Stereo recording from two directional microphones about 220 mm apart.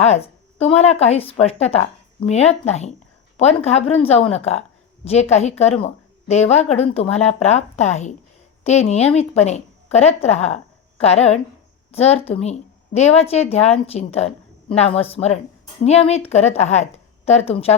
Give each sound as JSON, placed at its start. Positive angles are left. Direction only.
{"t": 0.0, "sound": "a woman's voice", "side_deg": 30}